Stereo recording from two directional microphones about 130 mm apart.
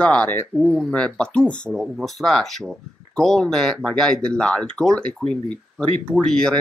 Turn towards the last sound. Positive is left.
turn(degrees=5)  # may be behind; listen again after turning